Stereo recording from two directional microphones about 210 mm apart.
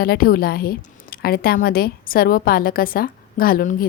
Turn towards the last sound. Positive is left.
turn(degrees=40)  # may be behind; listen again after turning